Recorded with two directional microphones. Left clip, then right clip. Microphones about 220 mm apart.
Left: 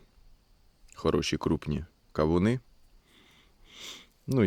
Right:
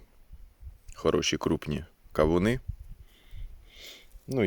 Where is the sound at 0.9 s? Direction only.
5° left (ahead or behind).